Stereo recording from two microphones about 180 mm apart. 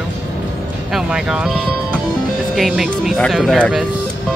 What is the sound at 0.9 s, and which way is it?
Speech, 5° right (ahead or behind).